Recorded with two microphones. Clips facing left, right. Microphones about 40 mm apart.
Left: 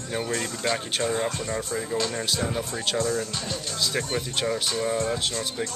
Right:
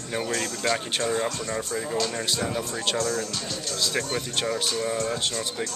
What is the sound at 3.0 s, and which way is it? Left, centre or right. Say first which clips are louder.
Speech: left 3 dB; left.